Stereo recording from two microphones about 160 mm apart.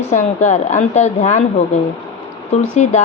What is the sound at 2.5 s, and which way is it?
Speech, 45° left (ahead or behind).